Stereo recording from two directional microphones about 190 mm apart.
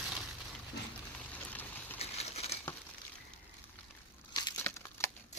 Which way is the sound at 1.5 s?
10° left (ahead or behind).